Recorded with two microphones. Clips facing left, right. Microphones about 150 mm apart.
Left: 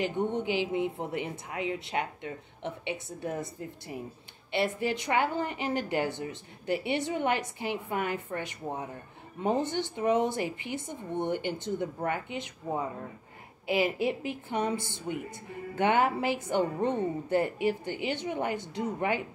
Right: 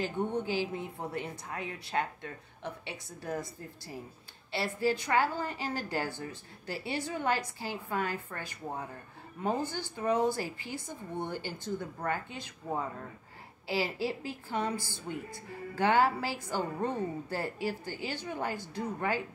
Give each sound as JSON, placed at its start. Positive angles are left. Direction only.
{"t": 0.0, "sound": "a woman's voice", "side_deg": 20}